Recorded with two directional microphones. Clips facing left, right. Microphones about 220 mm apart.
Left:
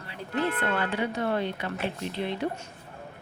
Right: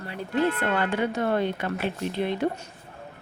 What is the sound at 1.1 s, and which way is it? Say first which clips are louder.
Speech: right 3 dB; 50° right (ahead or behind).